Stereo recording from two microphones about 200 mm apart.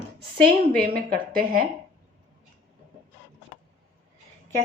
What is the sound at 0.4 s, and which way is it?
A woman's voice, 50° right (ahead or behind).